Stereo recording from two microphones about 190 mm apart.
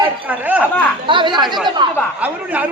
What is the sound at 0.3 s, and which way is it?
Speech, 10° right (ahead or behind).